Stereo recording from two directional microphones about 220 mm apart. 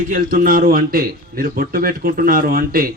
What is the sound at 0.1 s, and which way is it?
A man's voice, 40° right (ahead or behind).